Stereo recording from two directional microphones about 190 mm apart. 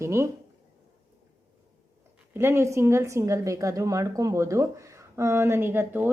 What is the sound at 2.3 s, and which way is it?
A woman's voice, 15° right (ahead or behind).